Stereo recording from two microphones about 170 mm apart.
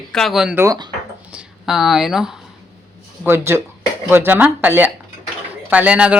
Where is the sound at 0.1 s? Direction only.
Centre (ahead or behind).